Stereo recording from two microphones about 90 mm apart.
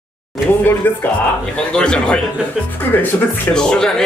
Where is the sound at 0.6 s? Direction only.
20° left (ahead or behind).